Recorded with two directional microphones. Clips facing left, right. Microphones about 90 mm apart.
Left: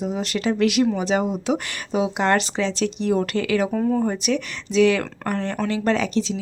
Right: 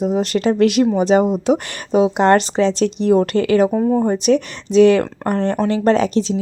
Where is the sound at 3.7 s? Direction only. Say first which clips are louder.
Right 5 dB; 25° right (ahead or behind).